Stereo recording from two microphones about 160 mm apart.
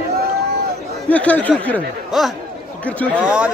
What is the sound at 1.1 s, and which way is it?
Speech, 10° left (ahead or behind).